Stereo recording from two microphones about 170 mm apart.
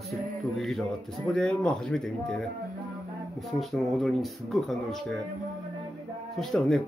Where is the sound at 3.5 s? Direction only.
Centre (ahead or behind).